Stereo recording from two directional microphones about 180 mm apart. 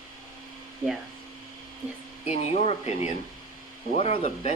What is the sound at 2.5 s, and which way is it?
Speech, 35° left (ahead or behind).